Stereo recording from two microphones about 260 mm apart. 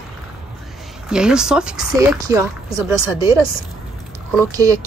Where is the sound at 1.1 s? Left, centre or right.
Centre.